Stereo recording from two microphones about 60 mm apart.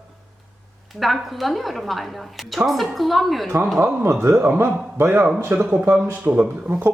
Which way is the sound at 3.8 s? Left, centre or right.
Right.